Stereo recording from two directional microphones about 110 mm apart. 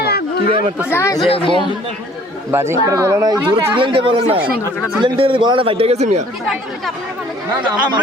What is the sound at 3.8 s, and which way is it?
A man's voice, 55° right (ahead or behind).